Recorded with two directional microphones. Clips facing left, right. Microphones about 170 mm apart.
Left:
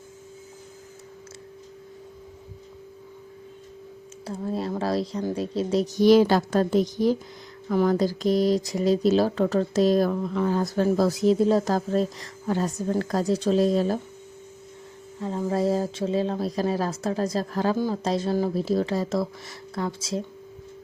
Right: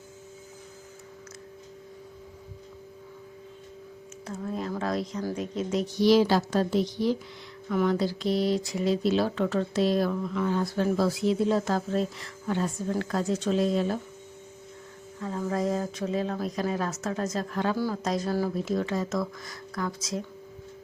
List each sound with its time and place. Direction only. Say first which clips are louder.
4.3 s a woman's voice: left 4 dB; 30° left (ahead or behind)
15.2 s speech: left 4 dB; 25° left (ahead or behind)
17.7 s speech: left 3 dB; 25° left (ahead or behind)